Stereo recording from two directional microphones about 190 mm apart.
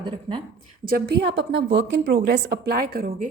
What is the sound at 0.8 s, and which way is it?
Speech, 50° right (ahead or behind).